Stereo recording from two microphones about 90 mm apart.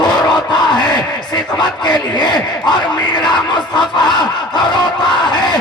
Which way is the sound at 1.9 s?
50° left (ahead or behind).